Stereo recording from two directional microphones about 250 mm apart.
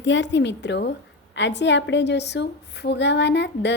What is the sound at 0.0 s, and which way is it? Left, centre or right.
A woman's voice, left.